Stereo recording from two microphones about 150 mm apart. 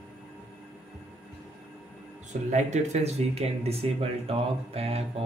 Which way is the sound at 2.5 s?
50° right (ahead or behind).